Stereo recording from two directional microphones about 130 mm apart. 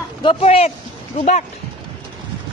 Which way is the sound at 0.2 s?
45° left (ahead or behind).